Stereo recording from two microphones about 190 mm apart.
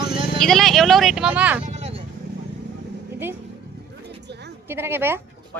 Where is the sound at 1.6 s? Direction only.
35° right (ahead or behind).